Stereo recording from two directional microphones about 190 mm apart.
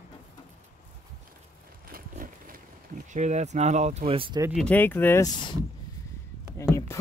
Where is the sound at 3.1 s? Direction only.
40° right (ahead or behind).